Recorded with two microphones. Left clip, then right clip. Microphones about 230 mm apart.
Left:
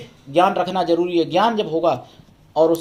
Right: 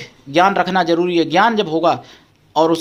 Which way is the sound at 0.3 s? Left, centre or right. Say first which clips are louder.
Right 3 dB; right.